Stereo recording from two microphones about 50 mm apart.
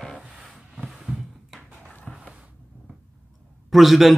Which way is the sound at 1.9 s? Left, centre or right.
Left.